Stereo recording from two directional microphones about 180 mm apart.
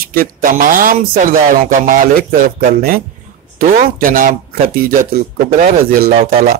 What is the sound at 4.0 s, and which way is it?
Speech, 50° right (ahead or behind).